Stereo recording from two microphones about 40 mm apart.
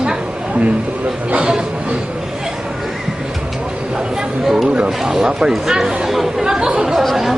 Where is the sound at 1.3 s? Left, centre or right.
Right.